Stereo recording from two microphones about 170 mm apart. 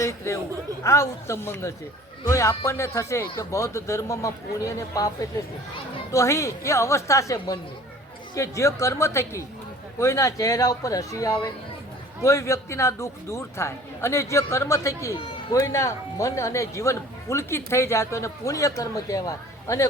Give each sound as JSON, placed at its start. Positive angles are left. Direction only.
{"t": 0.0, "sound": "a man's voice", "side_deg": 20}